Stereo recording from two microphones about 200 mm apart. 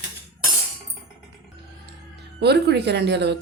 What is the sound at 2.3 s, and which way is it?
Speech, 55° right (ahead or behind).